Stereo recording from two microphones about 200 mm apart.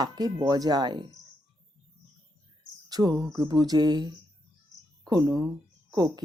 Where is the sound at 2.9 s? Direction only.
20° right (ahead or behind).